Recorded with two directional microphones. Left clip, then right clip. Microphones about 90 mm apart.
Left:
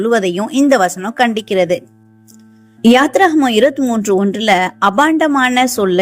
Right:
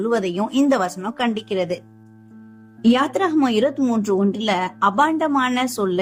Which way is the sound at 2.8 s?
35° left (ahead or behind).